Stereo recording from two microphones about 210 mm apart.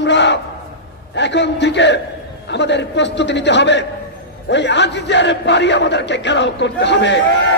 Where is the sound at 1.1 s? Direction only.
55° left (ahead or behind).